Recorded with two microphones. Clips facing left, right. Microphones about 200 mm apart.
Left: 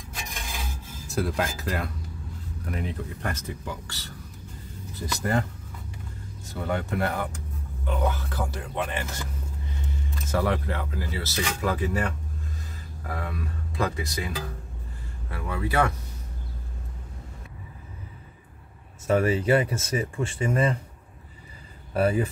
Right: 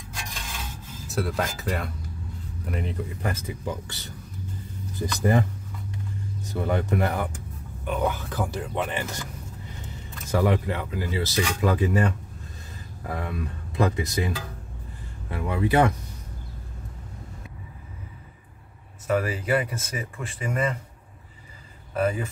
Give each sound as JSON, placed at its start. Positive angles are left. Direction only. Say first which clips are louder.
{"t": 1.0, "sound": "speech", "louder": "even", "side_deg": 0}
{"t": 3.6, "sound": "speech", "louder": "right 4 dB", "side_deg": -20}
{"t": 5.0, "sound": "speech", "louder": "right 4 dB", "side_deg": -15}
{"t": 6.5, "sound": "speech", "louder": "right 3 dB", "side_deg": -15}
{"t": 10.3, "sound": "speech", "louder": "right 3 dB", "side_deg": -15}
{"t": 15.3, "sound": "speech", "louder": "right 4 dB", "side_deg": -20}
{"t": 19.0, "sound": "speech", "louder": "left 3 dB", "side_deg": 30}
{"t": 21.9, "sound": "speech", "louder": "left 2 dB", "side_deg": 35}